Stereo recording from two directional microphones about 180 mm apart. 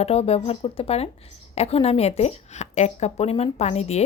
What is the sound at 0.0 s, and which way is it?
A woman's voice, 35° left (ahead or behind).